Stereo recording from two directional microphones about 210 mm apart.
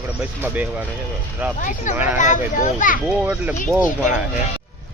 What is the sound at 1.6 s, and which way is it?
A child's voice, 35° left (ahead or behind).